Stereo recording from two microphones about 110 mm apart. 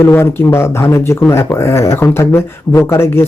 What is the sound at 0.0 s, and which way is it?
Speech, 20° left (ahead or behind).